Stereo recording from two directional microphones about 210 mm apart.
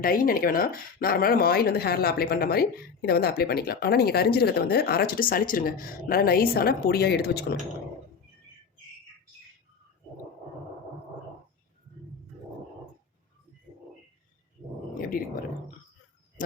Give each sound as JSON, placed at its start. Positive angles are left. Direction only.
{"t": 0.0, "sound": "speech", "side_deg": 45}
{"t": 15.1, "sound": "speech", "side_deg": 40}